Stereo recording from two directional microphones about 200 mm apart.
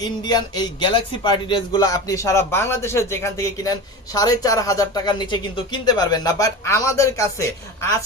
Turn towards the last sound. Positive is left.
turn(degrees=15)  # may be behind; listen again after turning